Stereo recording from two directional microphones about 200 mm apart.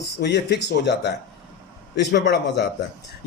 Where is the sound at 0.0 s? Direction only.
60° left (ahead or behind).